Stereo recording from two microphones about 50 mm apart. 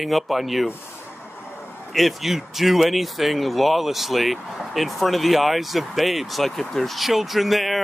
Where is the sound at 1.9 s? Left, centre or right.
Centre.